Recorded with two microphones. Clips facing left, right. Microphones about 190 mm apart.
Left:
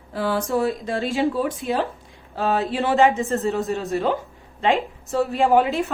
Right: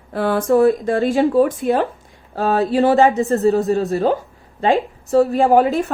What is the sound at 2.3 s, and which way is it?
Speech, 40° right (ahead or behind).